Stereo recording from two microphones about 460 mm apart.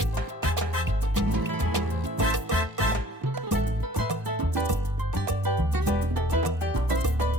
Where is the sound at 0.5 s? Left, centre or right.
Right.